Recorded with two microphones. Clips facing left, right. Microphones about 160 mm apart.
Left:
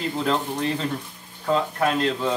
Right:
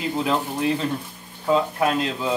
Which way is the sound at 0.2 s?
5° right (ahead or behind).